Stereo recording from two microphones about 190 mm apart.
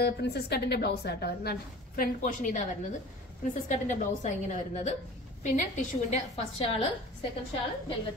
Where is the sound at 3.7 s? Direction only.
40° left (ahead or behind).